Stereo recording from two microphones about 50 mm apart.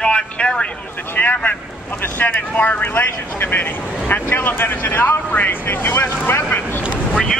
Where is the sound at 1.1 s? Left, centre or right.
Left.